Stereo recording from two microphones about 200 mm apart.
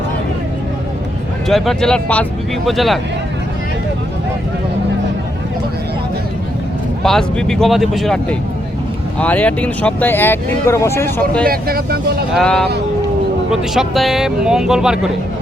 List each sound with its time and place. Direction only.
1.5 s speech: centre (ahead or behind)
7.0 s speech: 5° left (ahead or behind)
11.4 s speech: 50° right (ahead or behind)
12.3 s speech: 5° left (ahead or behind)